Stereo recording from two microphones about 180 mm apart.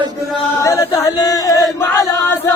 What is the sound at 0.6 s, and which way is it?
Chant, 15° left (ahead or behind).